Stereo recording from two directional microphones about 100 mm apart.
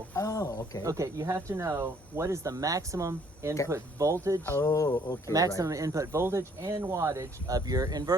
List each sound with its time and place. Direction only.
0.1 s speech: 30° left (ahead or behind)
0.8 s speech: 35° right (ahead or behind)
4.4 s speech: 25° left (ahead or behind)
5.5 s speech: 35° right (ahead or behind)